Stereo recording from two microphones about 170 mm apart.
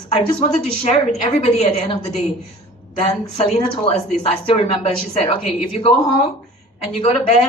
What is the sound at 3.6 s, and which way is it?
A woman's voice, 35° left (ahead or behind).